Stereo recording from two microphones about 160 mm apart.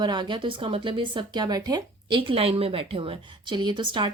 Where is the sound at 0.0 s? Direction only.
30° right (ahead or behind).